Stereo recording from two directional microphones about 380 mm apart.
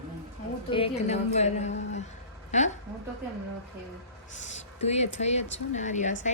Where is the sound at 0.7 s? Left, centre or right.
Centre.